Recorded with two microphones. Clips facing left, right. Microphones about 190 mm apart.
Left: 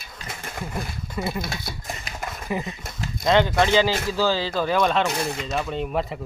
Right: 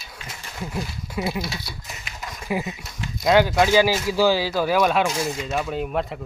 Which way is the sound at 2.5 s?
5° right (ahead or behind).